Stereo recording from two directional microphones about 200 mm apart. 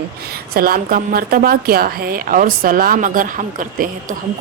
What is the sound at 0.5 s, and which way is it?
Speech, 45° right (ahead or behind).